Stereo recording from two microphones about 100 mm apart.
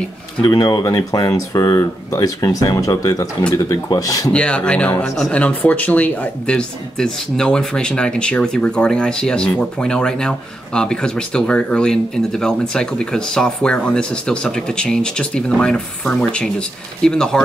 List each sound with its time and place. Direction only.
0.4 s speech: 40° left (ahead or behind)
4.3 s speech: 10° left (ahead or behind)